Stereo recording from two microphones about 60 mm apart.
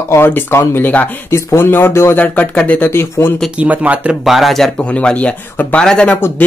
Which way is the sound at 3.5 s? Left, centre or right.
Right.